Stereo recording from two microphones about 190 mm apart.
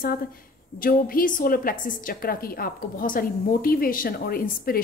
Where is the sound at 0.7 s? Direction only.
45° left (ahead or behind).